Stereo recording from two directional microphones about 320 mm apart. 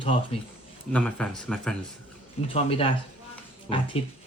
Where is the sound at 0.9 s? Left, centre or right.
Centre.